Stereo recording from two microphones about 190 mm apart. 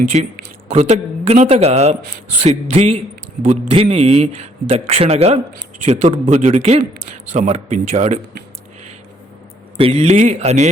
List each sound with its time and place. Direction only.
0.0 s a man's voice: 40° right (ahead or behind)
9.7 s a man's voice: 30° right (ahead or behind)